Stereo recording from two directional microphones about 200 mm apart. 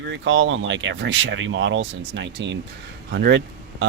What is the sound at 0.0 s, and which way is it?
Speech, 70° right (ahead or behind).